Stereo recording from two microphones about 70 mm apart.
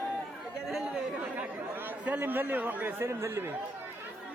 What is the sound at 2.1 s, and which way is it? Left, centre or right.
Speech, right.